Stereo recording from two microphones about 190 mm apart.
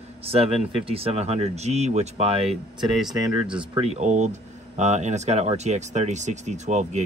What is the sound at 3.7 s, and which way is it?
Speech, 35° right (ahead or behind).